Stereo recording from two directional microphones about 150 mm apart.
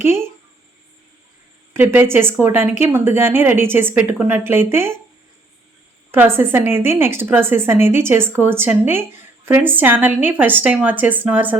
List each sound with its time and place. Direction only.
0.0 s a woman's voice: 15° right (ahead or behind)
1.7 s a woman's voice: 15° right (ahead or behind)
6.1 s a woman's voice: 15° right (ahead or behind)